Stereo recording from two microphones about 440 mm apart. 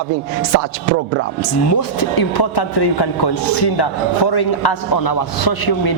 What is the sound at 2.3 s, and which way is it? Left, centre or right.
A man's voice, left.